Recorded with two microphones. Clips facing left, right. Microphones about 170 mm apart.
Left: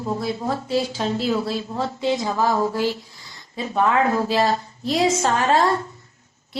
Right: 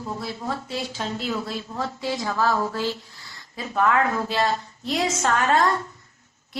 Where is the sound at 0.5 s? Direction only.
35° left (ahead or behind).